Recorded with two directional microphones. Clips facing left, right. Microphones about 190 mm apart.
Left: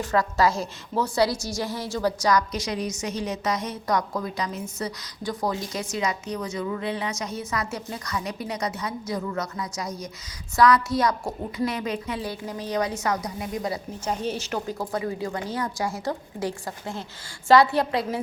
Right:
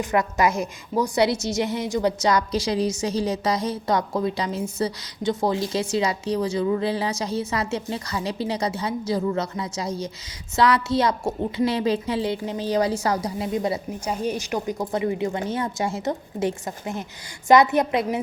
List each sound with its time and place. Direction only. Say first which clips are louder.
0.0 s a woman's voice: right 1 dB; 20° right (ahead or behind)
14.0 s a woman's voice: even; 10° right (ahead or behind)